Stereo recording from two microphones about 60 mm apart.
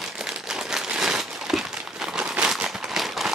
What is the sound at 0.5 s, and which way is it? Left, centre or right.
Crumpling, centre.